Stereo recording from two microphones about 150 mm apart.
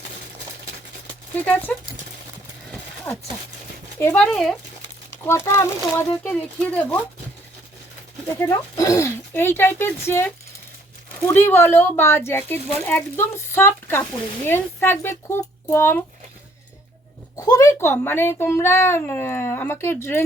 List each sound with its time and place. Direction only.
1.4 s speech: 10° left (ahead or behind)
3.1 s speech: 15° left (ahead or behind)
5.2 s speech: 20° left (ahead or behind)
8.4 s speech: 20° left (ahead or behind)
17.3 s speech: 20° left (ahead or behind)